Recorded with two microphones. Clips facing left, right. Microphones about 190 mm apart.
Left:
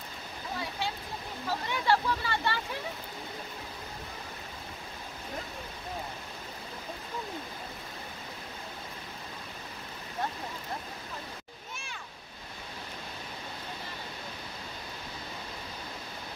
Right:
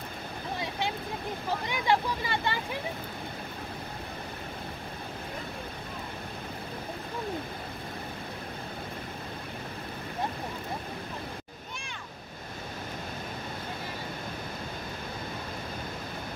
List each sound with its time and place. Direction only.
1.7 s speech: 15° right (ahead or behind)